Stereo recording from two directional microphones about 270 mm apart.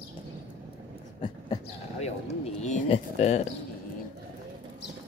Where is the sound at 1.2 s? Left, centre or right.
Left.